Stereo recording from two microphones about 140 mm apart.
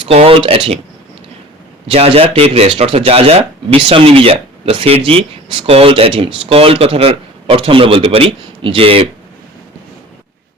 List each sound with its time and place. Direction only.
0.0 s speech: 45° right (ahead or behind)
1.9 s speech: 45° right (ahead or behind)